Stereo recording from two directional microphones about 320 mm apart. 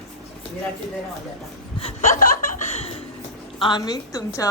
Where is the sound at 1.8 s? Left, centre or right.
Left.